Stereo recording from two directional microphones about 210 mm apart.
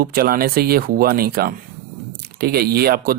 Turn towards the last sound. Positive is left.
turn(degrees=-45)  # may be behind; listen again after turning